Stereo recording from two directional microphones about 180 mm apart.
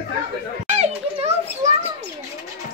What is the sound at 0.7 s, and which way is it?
Children playing, 40° right (ahead or behind).